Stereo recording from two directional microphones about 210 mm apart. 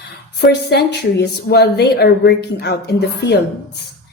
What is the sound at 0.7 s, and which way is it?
A woman's voice, 50° left (ahead or behind).